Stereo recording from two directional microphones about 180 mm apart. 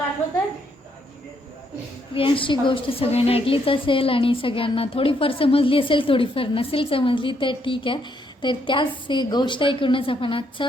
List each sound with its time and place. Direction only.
2.1 s a woman's voice: 30° left (ahead or behind)